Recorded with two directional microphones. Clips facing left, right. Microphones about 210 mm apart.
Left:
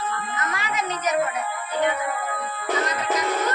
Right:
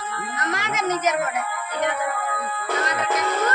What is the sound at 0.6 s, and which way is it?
Speech, 85° right.